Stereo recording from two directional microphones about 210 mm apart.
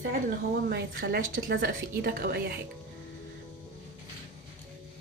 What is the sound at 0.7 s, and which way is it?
A woman's voice, 50° right (ahead or behind).